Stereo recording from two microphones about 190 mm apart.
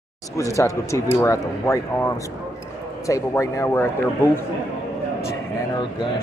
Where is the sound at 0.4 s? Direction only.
15° left (ahead or behind).